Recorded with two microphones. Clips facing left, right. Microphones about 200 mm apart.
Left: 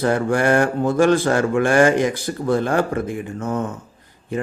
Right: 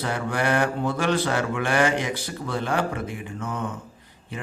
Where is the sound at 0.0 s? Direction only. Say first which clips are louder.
Left 8 dB; 45° left (ahead or behind).